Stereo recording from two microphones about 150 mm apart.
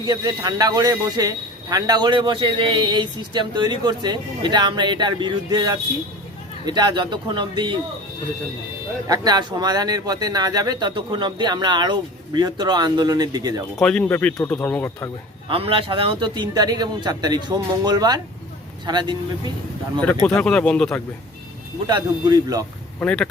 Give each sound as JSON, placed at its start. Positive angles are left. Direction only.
{"t": 0.0, "sound": "speech", "side_deg": -30}
{"t": 9.0, "sound": "speech", "side_deg": -25}
{"t": 13.7, "sound": "speech", "side_deg": 5}
{"t": 15.4, "sound": "speech", "side_deg": -35}
{"t": 20.4, "sound": "speech", "side_deg": 5}
{"t": 21.8, "sound": "speech", "side_deg": -25}
{"t": 23.0, "sound": "speech", "side_deg": 5}